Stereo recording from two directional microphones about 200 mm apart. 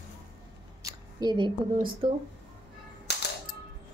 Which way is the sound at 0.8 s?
20° right (ahead or behind).